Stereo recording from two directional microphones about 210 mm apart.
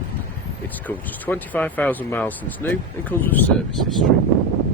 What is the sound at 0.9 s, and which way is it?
Speech, 10° left (ahead or behind).